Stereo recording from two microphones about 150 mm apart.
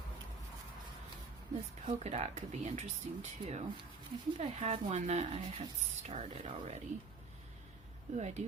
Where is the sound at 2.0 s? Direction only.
50° right (ahead or behind).